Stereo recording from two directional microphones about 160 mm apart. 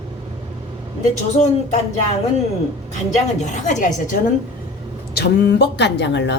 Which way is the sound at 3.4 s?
50° left (ahead or behind).